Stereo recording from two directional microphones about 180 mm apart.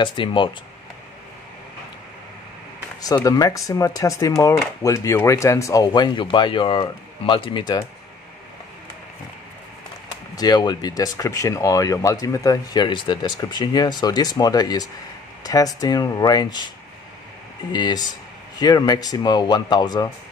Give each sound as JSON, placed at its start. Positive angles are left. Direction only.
{"t": 0.0, "sound": "speech", "side_deg": 25}
{"t": 3.3, "sound": "speech", "side_deg": 20}
{"t": 10.3, "sound": "speech", "side_deg": 20}
{"t": 17.7, "sound": "speech", "side_deg": 20}